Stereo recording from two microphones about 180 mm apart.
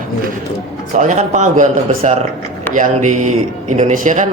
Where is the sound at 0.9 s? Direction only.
40° right (ahead or behind).